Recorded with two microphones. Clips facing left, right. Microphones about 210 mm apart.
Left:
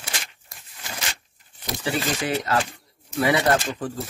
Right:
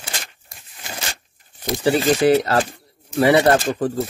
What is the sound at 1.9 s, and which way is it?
Speech, 35° right (ahead or behind).